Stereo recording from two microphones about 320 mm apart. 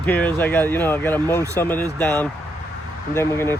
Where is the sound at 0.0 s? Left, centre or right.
Centre.